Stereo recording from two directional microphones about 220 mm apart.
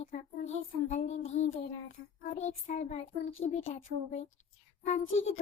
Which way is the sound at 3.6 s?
30° left (ahead or behind).